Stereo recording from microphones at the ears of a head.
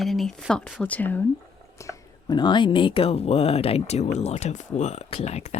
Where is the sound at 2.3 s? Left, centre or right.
Left.